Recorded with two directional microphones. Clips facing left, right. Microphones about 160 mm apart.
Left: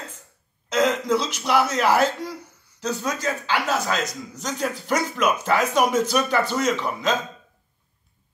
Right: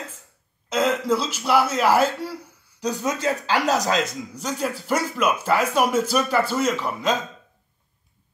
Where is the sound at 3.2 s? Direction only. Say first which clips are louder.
Right 3 dB; 35° right (ahead or behind).